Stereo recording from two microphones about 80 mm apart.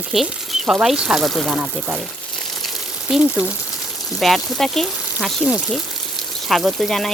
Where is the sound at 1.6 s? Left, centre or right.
Centre.